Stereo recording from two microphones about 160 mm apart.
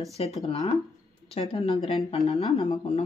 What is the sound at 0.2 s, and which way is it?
Speech, 35° left (ahead or behind).